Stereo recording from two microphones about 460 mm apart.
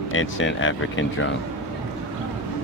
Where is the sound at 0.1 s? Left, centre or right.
Left.